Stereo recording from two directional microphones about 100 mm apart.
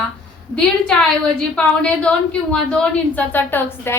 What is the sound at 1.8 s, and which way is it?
A woman's voice, 10° left (ahead or behind).